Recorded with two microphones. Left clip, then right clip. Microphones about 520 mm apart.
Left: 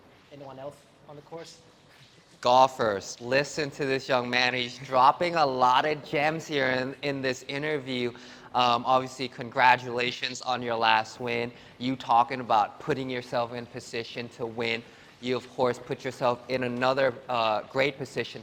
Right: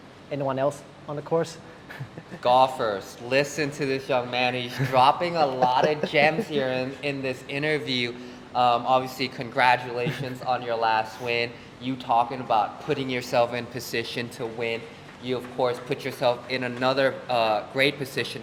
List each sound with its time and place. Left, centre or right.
2.4 s speech: left
8.5 s speech: left
11.8 s a man's voice: left
13.1 s speech: left
15.2 s speech: left